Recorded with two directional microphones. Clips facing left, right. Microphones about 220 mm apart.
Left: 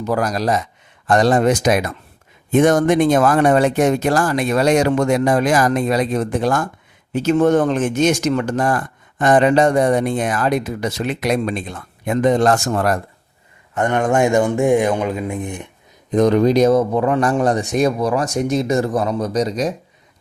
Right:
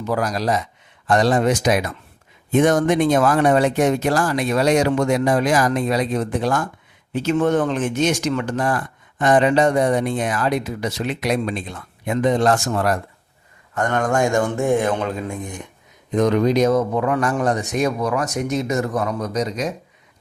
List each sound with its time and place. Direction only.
0.0 s speech: 45° left (ahead or behind)
13.7 s speech: 15° left (ahead or behind)
16.1 s a man's voice: 35° left (ahead or behind)